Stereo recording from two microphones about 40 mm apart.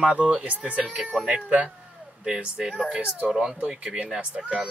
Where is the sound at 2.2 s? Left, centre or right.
Centre.